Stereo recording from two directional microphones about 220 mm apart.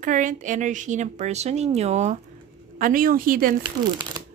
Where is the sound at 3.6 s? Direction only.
20° right (ahead or behind).